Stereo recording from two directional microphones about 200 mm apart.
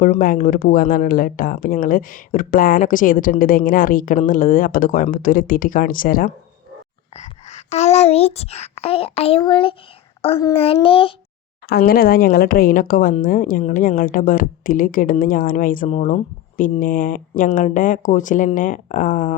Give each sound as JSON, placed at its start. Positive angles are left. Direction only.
{"t": 0.0, "sound": "speech", "side_deg": 40}
{"t": 7.2, "sound": "a woman's voice", "side_deg": 35}
{"t": 11.7, "sound": "speech", "side_deg": 50}